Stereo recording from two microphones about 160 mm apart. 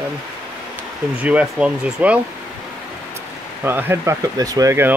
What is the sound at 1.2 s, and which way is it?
Speech, 5° right (ahead or behind).